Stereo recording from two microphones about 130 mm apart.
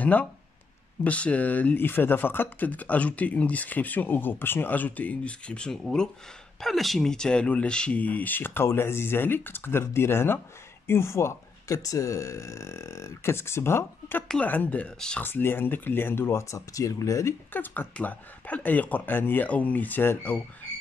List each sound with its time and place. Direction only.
0.0 s speech: 10° left (ahead or behind)